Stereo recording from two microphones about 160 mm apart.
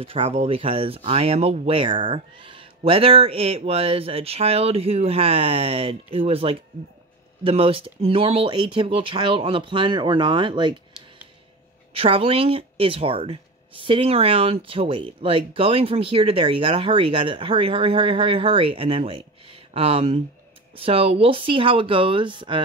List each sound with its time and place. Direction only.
0.0 s speech: 35° right (ahead or behind)
11.9 s speech: 35° right (ahead or behind)